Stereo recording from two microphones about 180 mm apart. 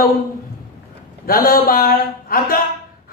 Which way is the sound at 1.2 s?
55° left (ahead or behind).